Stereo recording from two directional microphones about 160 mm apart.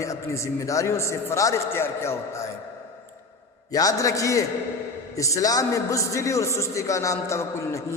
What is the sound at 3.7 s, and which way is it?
A man's voice, 20° left (ahead or behind).